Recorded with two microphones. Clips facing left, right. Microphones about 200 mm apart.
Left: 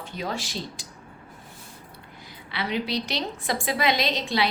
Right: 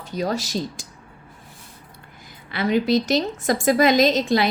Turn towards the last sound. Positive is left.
turn(degrees=-45)  # may be behind; listen again after turning